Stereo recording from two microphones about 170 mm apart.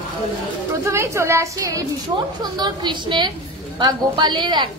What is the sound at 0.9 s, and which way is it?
A woman's voice, 15° right (ahead or behind).